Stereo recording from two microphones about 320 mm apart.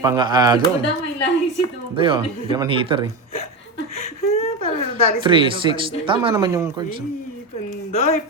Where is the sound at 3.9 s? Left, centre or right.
Left.